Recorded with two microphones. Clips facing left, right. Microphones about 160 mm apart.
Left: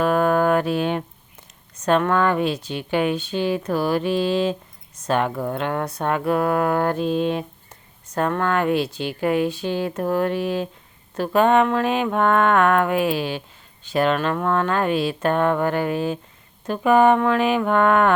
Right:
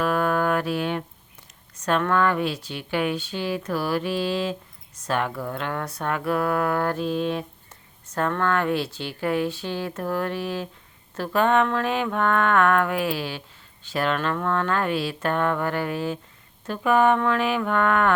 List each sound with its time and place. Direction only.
0.0 s music: 25° left (ahead or behind)
1.8 s speech: 20° left (ahead or behind)